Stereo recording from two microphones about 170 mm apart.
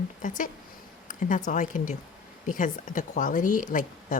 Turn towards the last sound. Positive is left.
turn(degrees=50)  # may be behind; listen again after turning